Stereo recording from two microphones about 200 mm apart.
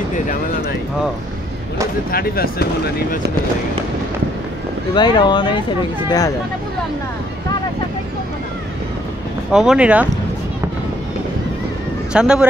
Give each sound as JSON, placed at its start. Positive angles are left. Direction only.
{"t": 2.0, "sound": "speech", "side_deg": 50}
{"t": 4.9, "sound": "speech", "side_deg": 20}
{"t": 9.5, "sound": "speech", "side_deg": -5}
{"t": 12.1, "sound": "speech", "side_deg": -5}